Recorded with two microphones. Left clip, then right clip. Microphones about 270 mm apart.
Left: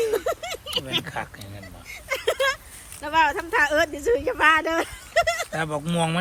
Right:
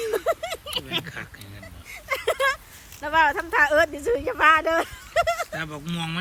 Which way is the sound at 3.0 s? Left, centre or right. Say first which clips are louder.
Right 1 dB; centre.